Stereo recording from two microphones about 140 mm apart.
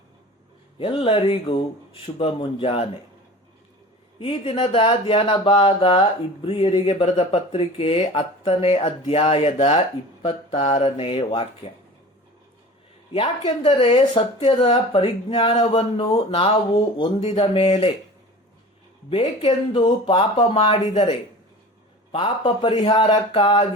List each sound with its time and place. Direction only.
0.8 s speech: 40° left (ahead or behind)
4.2 s speech: 45° left (ahead or behind)
13.1 s speech: 45° left (ahead or behind)
19.5 s speech: 35° left (ahead or behind)
20.3 s speech: 50° left (ahead or behind)